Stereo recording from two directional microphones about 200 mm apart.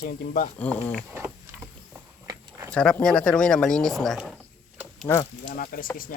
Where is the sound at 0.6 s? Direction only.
5° left (ahead or behind).